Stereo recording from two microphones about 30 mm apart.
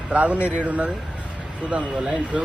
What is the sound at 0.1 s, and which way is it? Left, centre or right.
Speech, right.